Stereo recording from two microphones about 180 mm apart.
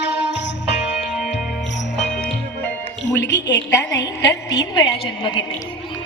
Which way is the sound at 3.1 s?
75° left (ahead or behind).